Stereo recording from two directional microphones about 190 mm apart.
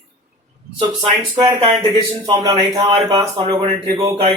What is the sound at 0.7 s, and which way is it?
Speech, 25° right (ahead or behind).